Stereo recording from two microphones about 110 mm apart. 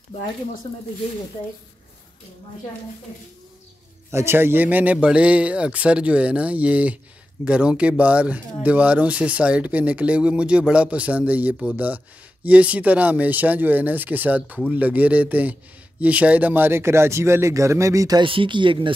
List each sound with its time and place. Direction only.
4.1 s speech: 25° right (ahead or behind)
18.2 s speech: 50° right (ahead or behind)